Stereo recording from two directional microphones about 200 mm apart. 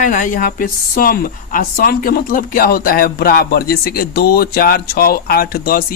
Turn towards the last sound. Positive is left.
turn(degrees=45)  # may be behind; listen again after turning